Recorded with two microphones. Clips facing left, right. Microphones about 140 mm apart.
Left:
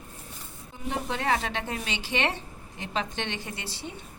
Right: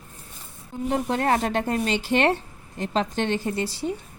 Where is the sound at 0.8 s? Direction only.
45° right (ahead or behind).